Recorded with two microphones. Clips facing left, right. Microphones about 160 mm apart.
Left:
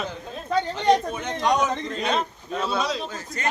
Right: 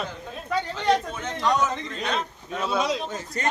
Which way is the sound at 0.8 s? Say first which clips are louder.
Left 2 dB; 15° left (ahead or behind).